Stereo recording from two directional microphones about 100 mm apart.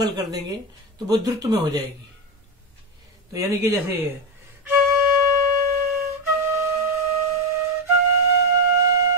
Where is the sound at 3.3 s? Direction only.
30° right (ahead or behind).